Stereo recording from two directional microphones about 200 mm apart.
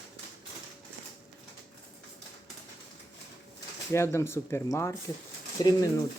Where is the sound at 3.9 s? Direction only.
15° left (ahead or behind).